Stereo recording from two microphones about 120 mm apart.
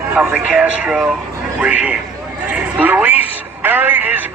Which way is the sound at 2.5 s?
10° right (ahead or behind).